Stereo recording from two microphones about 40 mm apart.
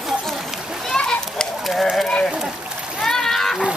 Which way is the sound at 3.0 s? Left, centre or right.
Centre.